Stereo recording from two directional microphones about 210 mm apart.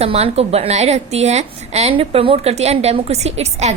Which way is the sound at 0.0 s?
30° right (ahead or behind).